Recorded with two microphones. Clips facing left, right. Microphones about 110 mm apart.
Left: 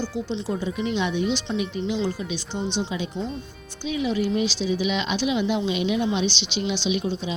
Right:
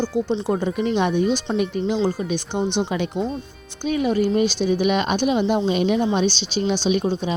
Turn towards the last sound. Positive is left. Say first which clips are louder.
# right 5 dB
turn(degrees=-50)  # may be behind; listen again after turning